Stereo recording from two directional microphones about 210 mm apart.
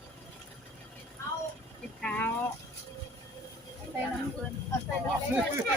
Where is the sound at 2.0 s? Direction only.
5° left (ahead or behind).